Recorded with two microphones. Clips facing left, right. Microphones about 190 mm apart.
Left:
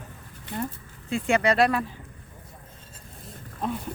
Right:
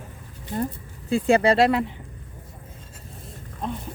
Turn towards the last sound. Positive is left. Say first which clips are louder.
# left 1 dB
turn(degrees=5)  # may be behind; listen again after turning